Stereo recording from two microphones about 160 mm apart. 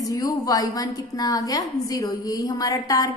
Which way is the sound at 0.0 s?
20° left (ahead or behind).